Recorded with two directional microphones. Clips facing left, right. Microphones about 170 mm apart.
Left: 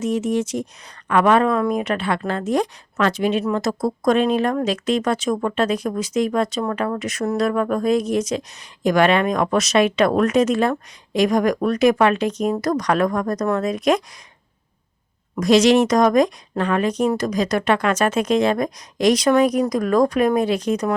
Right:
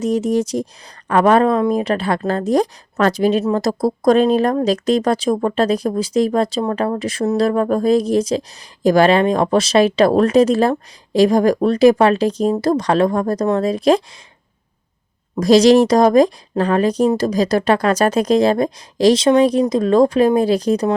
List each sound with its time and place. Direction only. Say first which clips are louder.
0.0 s a woman's voice: right 4 dB; 35° right (ahead or behind)
15.4 s a woman's voice: right 4 dB; 35° right (ahead or behind)